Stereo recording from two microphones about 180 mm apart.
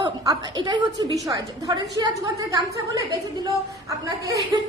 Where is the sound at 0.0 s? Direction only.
25° right (ahead or behind).